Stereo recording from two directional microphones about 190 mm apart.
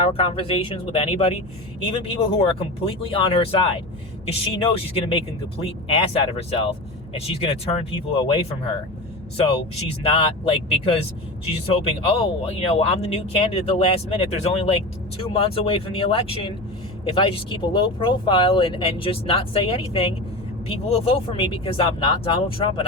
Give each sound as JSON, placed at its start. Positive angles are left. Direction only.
{"t": 0.0, "sound": "speech", "side_deg": 30}
{"t": 9.4, "sound": "speech", "side_deg": 30}